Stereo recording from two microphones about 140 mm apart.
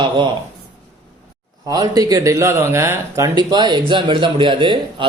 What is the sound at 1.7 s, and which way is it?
Speech, 25° right (ahead or behind).